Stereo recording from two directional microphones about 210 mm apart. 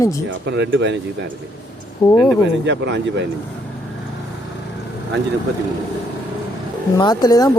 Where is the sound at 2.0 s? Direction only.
20° left (ahead or behind).